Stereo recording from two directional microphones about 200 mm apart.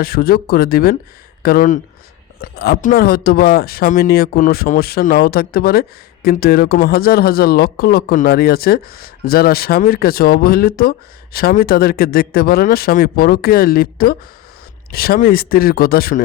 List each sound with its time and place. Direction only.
0.0 s speech: 50° left (ahead or behind)